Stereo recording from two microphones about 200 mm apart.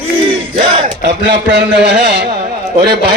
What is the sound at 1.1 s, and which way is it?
A man's voice, 60° right (ahead or behind).